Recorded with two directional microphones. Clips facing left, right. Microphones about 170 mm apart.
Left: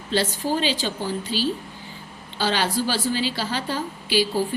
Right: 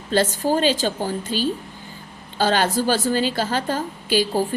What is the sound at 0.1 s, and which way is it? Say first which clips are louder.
A woman's voice: right 4 dB; 45° right (ahead or behind).